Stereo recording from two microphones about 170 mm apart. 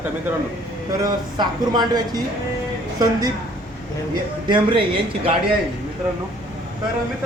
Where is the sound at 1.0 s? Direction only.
25° right (ahead or behind).